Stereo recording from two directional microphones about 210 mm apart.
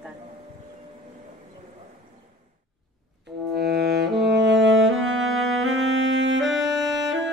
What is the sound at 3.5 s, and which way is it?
Music, 50° right (ahead or behind).